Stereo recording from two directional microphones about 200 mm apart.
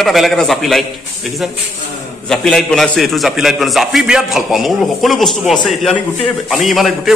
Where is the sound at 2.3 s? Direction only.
Centre (ahead or behind).